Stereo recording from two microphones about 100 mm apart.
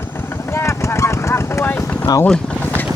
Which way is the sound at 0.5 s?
30° left (ahead or behind).